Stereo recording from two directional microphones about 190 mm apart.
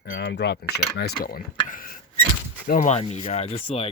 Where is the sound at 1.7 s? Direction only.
50° left (ahead or behind).